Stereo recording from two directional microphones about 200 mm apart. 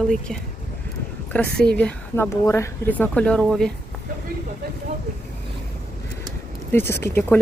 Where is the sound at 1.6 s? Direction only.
5° left (ahead or behind).